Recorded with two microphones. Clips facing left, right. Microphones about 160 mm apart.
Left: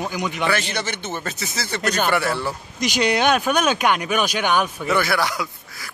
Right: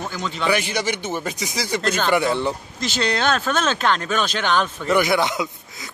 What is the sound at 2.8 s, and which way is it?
Speech, 15° left (ahead or behind).